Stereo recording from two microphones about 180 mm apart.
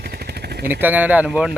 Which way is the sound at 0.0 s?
65° right (ahead or behind).